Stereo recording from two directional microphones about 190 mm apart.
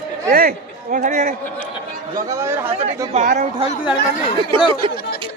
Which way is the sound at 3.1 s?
35° right (ahead or behind).